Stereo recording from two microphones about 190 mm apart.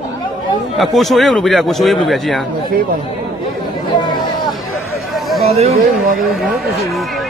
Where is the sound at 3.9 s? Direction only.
25° left (ahead or behind).